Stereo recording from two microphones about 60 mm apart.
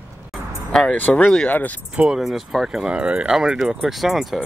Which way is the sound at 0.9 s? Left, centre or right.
Left.